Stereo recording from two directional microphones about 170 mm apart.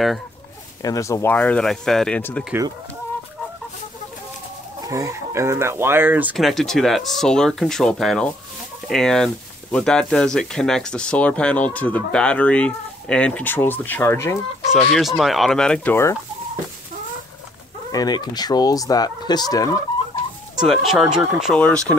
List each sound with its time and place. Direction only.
0.8 s speech: 20° left (ahead or behind)
4.8 s speech: 20° right (ahead or behind)
6.3 s speech: centre (ahead or behind)
14.7 s speech: 5° left (ahead or behind)
17.9 s fowl: 25° left (ahead or behind)
20.6 s speech: centre (ahead or behind)